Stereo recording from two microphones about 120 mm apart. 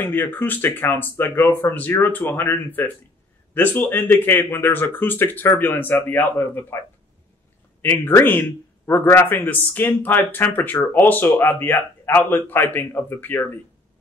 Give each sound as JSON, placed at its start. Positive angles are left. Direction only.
{"t": 0.0, "sound": "a man's voice", "side_deg": 15}
{"t": 7.8, "sound": "a man's voice", "side_deg": 20}